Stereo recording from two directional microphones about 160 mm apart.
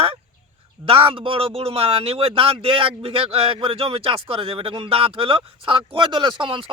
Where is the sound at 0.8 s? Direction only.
35° right (ahead or behind).